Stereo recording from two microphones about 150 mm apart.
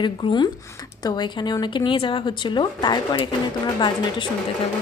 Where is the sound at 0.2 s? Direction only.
30° left (ahead or behind).